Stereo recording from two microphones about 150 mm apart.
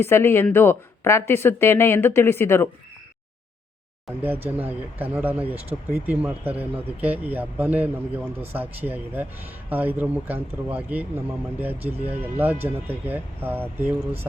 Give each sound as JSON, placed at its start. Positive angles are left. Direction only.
{"t": 0.0, "sound": "speech", "side_deg": 15}
{"t": 4.4, "sound": "speech", "side_deg": -10}
{"t": 12.2, "sound": "speech", "side_deg": -10}